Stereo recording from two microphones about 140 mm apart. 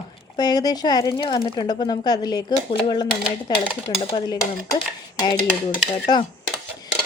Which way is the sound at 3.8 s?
45° left (ahead or behind).